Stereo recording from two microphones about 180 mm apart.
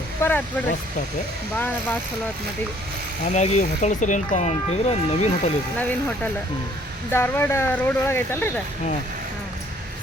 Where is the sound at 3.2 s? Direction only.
35° left (ahead or behind).